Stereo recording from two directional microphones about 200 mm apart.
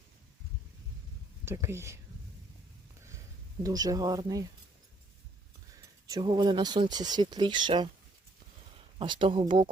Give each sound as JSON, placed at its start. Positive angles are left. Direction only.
{"t": 1.5, "sound": "speech", "side_deg": -15}
{"t": 3.6, "sound": "speech", "side_deg": -20}
{"t": 6.1, "sound": "speech", "side_deg": -20}
{"t": 9.0, "sound": "speech", "side_deg": -25}